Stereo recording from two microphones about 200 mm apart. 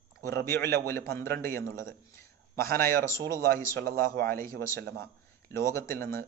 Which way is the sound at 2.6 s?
50° right (ahead or behind).